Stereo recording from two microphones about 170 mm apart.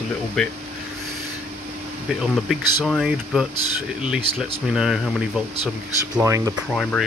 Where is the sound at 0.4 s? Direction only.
5° left (ahead or behind).